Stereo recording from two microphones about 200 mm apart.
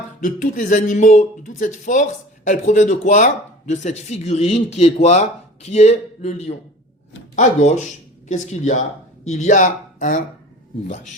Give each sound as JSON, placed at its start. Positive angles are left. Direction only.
{"t": 0.2, "sound": "speech", "side_deg": 40}